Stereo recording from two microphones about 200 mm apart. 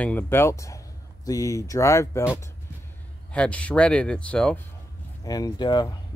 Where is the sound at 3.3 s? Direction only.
5° left (ahead or behind).